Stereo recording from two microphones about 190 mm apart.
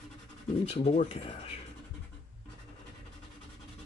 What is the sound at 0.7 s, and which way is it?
Speech, 35° left (ahead or behind).